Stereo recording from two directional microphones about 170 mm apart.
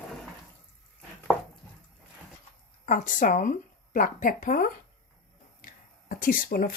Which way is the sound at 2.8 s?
50° left (ahead or behind).